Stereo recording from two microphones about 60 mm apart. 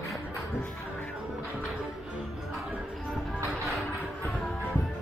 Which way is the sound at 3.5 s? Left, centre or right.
Centre.